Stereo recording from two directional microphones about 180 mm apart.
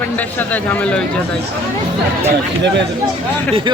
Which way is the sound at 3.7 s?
25° right (ahead or behind).